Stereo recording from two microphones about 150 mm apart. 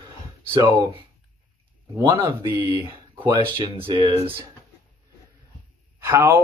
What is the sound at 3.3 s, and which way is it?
Speech, 35° right (ahead or behind).